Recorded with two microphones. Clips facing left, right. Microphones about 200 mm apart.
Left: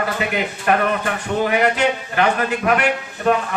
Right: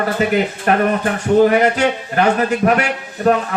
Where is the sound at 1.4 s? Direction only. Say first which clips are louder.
Right 5 dB; 40° right (ahead or behind).